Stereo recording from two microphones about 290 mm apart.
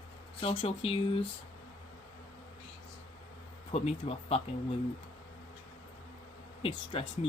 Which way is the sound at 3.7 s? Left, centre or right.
Left.